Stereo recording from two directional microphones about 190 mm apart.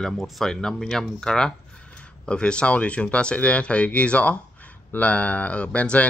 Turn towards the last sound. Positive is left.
turn(degrees=5)  # may be behind; listen again after turning